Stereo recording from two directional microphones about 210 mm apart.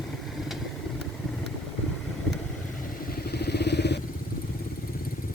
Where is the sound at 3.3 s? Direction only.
50° left (ahead or behind).